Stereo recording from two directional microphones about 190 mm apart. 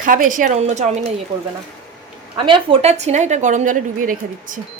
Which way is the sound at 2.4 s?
25° right (ahead or behind).